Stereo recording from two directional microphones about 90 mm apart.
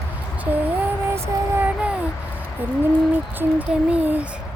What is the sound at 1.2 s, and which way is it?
Music, 20° right (ahead or behind).